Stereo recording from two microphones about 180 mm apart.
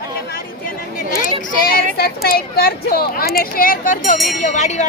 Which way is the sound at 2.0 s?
60° left (ahead or behind).